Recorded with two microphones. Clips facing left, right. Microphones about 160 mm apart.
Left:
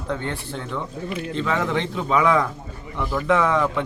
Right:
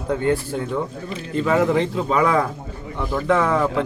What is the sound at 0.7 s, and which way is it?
Speech, 35° right (ahead or behind).